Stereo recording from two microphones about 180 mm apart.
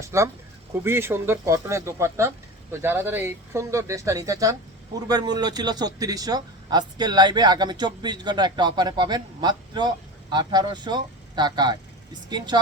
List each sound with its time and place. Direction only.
0.0 s speech: 15° right (ahead or behind)